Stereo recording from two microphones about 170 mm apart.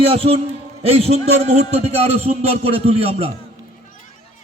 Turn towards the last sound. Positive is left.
turn(degrees=-35)  # may be behind; listen again after turning